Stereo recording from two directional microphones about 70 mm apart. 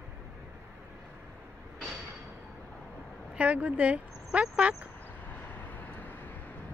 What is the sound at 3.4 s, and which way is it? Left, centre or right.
Speech, centre.